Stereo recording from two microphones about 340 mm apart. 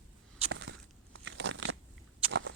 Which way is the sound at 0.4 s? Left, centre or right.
Right.